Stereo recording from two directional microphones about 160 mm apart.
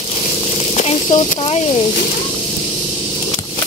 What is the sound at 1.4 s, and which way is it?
Speech, 35° left (ahead or behind).